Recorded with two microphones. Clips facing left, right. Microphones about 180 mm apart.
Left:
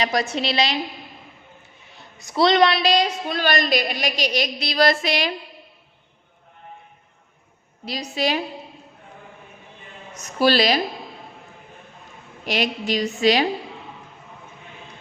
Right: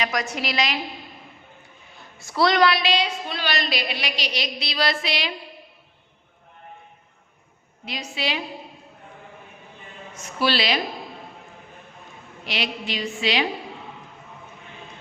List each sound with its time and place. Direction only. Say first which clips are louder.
0.0 s a woman's voice: left 4 dB; 30° left (ahead or behind)
2.1 s a woman's voice: left 3 dB; 20° left (ahead or behind)
2.8 s a woman's voice: left 4 dB; 40° left (ahead or behind)
7.9 s a woman's voice: left 5 dB; 35° left (ahead or behind)
10.2 s a woman's voice: left 5 dB; 40° left (ahead or behind)
12.5 s a woman's voice: left 6 dB; 45° left (ahead or behind)